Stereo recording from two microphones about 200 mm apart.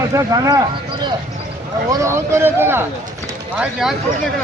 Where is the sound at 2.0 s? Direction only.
10° right (ahead or behind).